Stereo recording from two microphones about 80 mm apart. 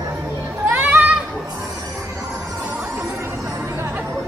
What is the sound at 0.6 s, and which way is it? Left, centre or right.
Music, right.